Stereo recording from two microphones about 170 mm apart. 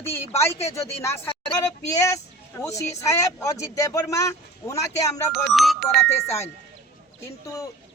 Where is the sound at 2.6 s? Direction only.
20° left (ahead or behind).